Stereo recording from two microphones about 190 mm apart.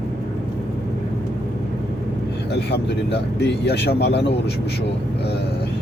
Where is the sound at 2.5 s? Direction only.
60° left (ahead or behind).